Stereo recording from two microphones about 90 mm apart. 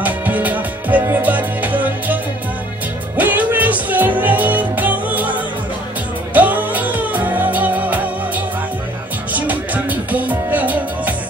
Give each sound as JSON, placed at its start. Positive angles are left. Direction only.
{"t": 0.0, "sound": "music", "side_deg": -20}
{"t": 3.2, "sound": "music", "side_deg": -20}
{"t": 9.3, "sound": "music", "side_deg": -20}